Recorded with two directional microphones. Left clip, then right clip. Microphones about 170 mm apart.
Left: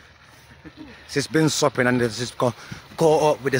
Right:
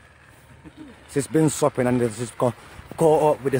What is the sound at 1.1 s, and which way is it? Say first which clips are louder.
Speech: even; 20° right (ahead or behind).